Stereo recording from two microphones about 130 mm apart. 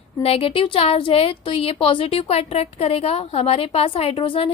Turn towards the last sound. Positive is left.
turn(degrees=45)  # may be behind; listen again after turning